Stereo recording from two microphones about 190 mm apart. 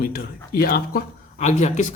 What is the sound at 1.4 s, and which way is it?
Speech, 40° left (ahead or behind).